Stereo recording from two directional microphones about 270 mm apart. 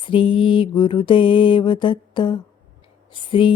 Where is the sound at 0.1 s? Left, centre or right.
Centre.